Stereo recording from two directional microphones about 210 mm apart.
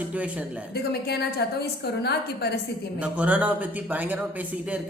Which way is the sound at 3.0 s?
5° right (ahead or behind).